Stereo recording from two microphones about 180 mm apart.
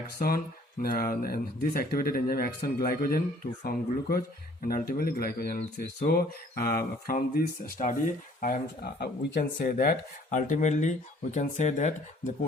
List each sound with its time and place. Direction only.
0.2 s speech: 55° left (ahead or behind)